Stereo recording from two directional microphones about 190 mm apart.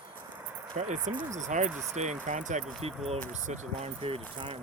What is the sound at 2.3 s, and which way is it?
Speech, 40° right (ahead or behind).